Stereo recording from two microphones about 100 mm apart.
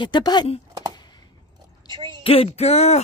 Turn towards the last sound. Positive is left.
turn(degrees=90)